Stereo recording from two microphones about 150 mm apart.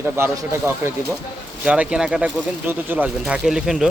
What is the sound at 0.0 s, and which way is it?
Speech, 15° right (ahead or behind).